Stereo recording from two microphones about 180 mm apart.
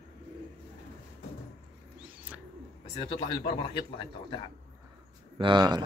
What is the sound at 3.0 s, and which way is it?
Speech, 30° left (ahead or behind).